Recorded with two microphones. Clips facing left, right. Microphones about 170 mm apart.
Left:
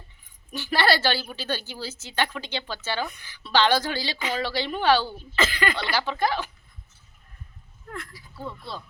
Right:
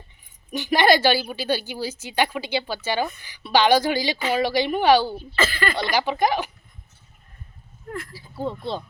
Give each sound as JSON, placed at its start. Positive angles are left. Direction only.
{"t": 0.5, "sound": "a woman's voice", "side_deg": -15}
{"t": 5.4, "sound": "speech", "side_deg": 15}
{"t": 5.9, "sound": "a woman's voice", "side_deg": -15}
{"t": 8.1, "sound": "speech", "side_deg": -30}